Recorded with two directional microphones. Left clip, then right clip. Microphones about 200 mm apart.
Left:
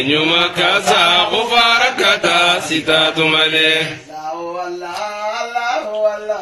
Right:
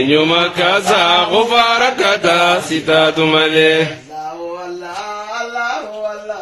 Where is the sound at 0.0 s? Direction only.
35° right (ahead or behind).